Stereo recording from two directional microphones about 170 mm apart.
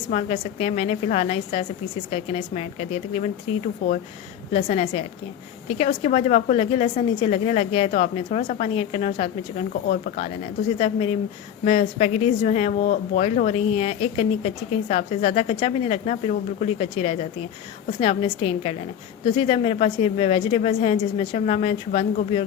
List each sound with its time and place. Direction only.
0.1 s speech: 40° left (ahead or behind)
4.5 s speech: 40° left (ahead or behind)
10.8 s speech: 35° left (ahead or behind)